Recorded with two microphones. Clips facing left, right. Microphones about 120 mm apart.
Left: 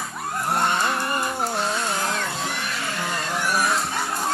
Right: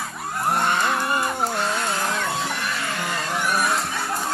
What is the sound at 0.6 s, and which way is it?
Music, centre (ahead or behind).